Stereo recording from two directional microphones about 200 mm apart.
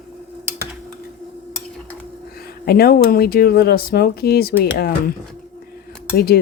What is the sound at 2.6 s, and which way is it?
Speech, 50° left (ahead or behind).